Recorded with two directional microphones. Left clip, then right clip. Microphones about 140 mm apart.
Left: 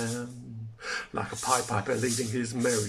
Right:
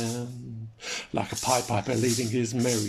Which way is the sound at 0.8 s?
20° right (ahead or behind).